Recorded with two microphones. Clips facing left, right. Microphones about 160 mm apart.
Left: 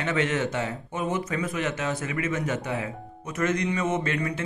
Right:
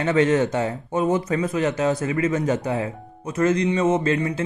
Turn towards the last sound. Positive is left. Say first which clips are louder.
# right 6 dB
turn(degrees=-30)  # may be behind; listen again after turning